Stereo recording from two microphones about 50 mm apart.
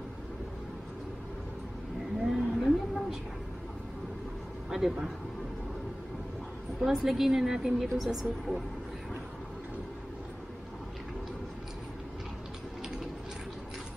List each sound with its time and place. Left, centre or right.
2.2 s a sound: centre
4.6 s speech: centre
6.8 s a woman's voice: centre